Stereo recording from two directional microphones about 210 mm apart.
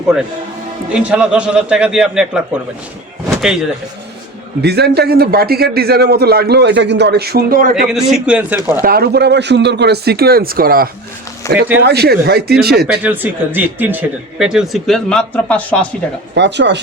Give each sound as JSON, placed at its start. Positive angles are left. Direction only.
{"t": 0.9, "sound": "speech", "side_deg": -5}
{"t": 3.2, "sound": "slam", "side_deg": -5}
{"t": 4.6, "sound": "a man's voice", "side_deg": -50}
{"t": 7.9, "sound": "speech", "side_deg": -5}
{"t": 8.8, "sound": "a man's voice", "side_deg": -45}
{"t": 11.4, "sound": "speech", "side_deg": 15}
{"t": 11.8, "sound": "a man's voice", "side_deg": -50}
{"t": 13.0, "sound": "speech", "side_deg": -10}
{"t": 16.3, "sound": "speech", "side_deg": -55}